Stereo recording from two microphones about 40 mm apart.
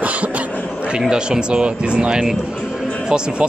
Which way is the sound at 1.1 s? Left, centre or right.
Right.